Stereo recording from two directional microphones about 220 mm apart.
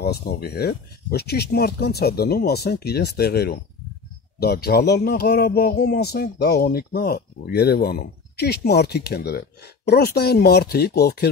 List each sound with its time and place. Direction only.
0.0 s speech: 45° left (ahead or behind)